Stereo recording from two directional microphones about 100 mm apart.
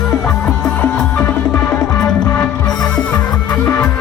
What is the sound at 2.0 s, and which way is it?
Music, 25° left (ahead or behind).